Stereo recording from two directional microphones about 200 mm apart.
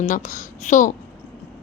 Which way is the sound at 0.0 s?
40° left (ahead or behind).